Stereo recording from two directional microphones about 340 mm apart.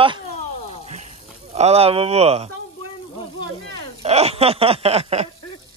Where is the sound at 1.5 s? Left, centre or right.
Centre.